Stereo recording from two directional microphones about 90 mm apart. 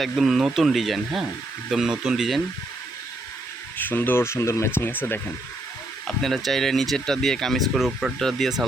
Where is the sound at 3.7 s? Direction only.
20° left (ahead or behind).